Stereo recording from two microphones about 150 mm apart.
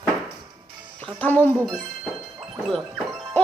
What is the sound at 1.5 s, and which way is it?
Speech, centre (ahead or behind).